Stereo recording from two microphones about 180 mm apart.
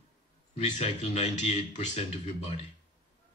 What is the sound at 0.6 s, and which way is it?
Speech, 40° left (ahead or behind).